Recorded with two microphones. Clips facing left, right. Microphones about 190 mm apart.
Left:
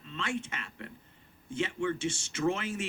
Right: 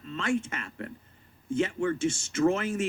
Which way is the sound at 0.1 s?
45° right (ahead or behind).